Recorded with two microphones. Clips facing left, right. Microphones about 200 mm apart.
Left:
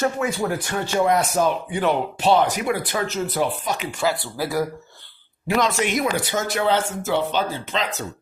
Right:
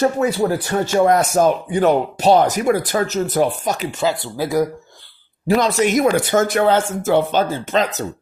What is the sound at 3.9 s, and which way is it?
Speech, 20° right (ahead or behind).